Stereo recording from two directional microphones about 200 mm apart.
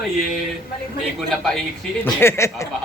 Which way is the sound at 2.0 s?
15° left (ahead or behind).